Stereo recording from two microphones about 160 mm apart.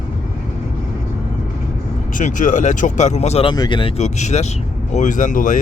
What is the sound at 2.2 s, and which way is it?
Speech, 55° left (ahead or behind).